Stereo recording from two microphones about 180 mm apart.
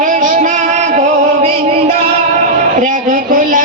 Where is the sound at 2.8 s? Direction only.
50° right (ahead or behind).